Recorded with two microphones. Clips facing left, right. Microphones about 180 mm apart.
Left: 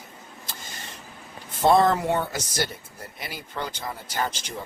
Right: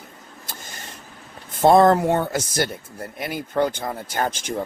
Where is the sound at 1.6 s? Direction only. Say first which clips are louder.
Right 5 dB; 50° right (ahead or behind).